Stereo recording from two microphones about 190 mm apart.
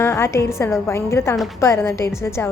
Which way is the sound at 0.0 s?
15° left (ahead or behind).